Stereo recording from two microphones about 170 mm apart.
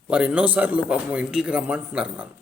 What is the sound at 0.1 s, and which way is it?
Speech, 5° right (ahead or behind).